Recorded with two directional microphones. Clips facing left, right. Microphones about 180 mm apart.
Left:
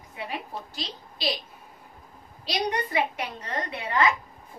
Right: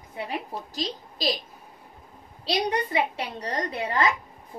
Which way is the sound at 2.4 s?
30° right (ahead or behind).